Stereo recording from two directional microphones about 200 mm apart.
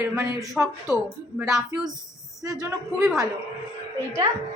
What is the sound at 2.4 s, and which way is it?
Speech, 15° right (ahead or behind).